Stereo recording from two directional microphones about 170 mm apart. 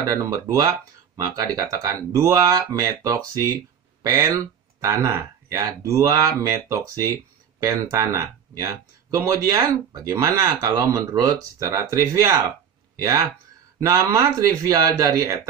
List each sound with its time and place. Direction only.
0.0 s speech: 20° right (ahead or behind)
13.7 s speech: 15° right (ahead or behind)